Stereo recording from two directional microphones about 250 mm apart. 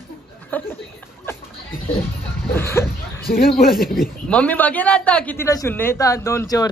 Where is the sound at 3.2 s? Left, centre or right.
Left.